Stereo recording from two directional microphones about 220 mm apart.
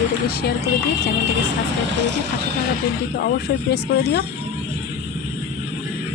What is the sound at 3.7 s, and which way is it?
Speech, 45° left (ahead or behind).